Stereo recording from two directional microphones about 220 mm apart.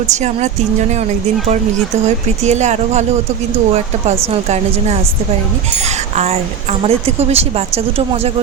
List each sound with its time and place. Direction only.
0.1 s speech: 30° right (ahead or behind)
2.0 s speech: 30° right (ahead or behind)
4.3 s speech: 30° right (ahead or behind)